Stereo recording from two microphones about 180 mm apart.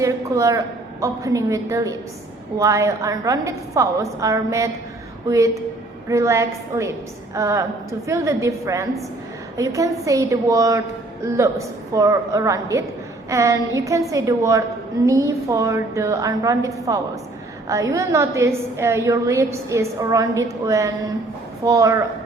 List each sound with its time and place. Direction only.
0.0 s a woman's voice: 15° right (ahead or behind)
6.1 s a woman's voice: 15° right (ahead or behind)